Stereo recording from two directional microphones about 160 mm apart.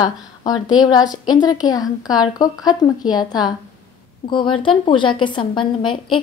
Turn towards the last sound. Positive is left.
turn(degrees=30)  # may be behind; listen again after turning